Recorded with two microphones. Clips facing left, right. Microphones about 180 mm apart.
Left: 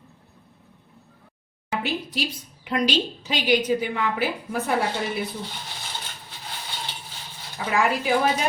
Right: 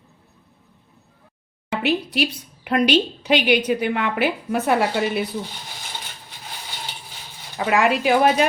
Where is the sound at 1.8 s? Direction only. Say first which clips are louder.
Right 9 dB; 70° right (ahead or behind).